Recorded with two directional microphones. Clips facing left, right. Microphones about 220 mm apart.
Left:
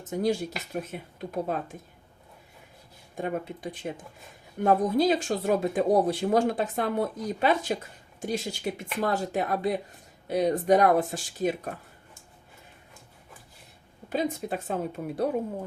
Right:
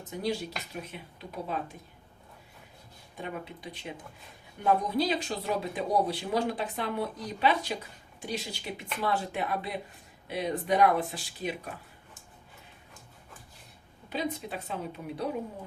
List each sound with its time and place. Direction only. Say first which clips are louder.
0.0 s speech: left 6 dB; 45° left (ahead or behind)
3.2 s speech: left 7 dB; 45° left (ahead or behind)
14.1 s speech: left 5 dB; 45° left (ahead or behind)